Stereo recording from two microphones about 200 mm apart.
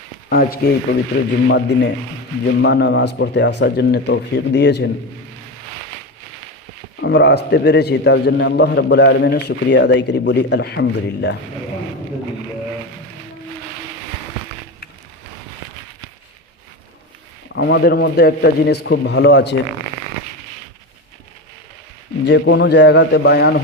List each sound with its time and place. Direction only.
0.3 s speech: 50° left (ahead or behind)
1.5 s a man's voice: 60° left (ahead or behind)
7.0 s a man's voice: 60° left (ahead or behind)
17.5 s a man's voice: 55° left (ahead or behind)
22.3 s a man's voice: 60° left (ahead or behind)